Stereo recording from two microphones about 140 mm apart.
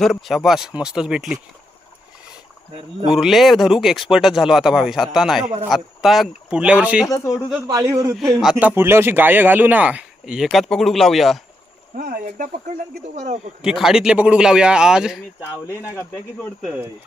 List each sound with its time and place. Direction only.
0.0 s speech: centre (ahead or behind)
3.2 s speech: centre (ahead or behind)
7.1 s speech: 25° left (ahead or behind)
7.7 s a man's voice: 25° right (ahead or behind); by 11.3 s centre (ahead or behind)
11.9 s speech: 70° right (ahead or behind); by 13.5 s 55° right (ahead or behind)
13.6 s speech: 5° right (ahead or behind)